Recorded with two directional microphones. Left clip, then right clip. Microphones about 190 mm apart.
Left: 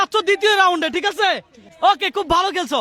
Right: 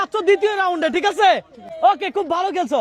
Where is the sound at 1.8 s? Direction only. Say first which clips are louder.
Even; 25° left (ahead or behind).